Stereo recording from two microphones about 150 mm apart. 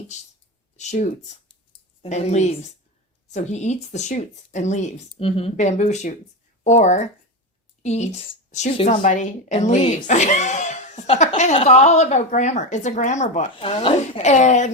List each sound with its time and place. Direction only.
0.8 s a woman's voice: 50° left (ahead or behind)
8.9 s speech: 55° left (ahead or behind)
13.6 s speech: 35° left (ahead or behind)
14.1 s speech: 50° left (ahead or behind)